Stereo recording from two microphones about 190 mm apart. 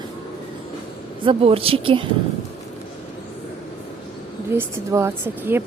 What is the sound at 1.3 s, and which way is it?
Speech, 30° right (ahead or behind).